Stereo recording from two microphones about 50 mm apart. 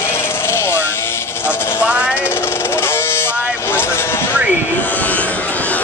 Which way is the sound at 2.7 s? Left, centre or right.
Left.